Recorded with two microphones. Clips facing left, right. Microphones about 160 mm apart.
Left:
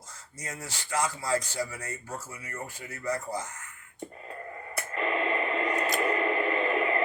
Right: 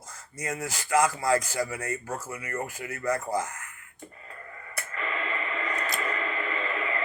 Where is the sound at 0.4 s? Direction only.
90° right.